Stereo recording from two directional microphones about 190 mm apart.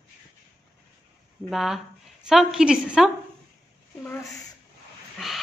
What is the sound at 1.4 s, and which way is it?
A woman's voice, centre (ahead or behind).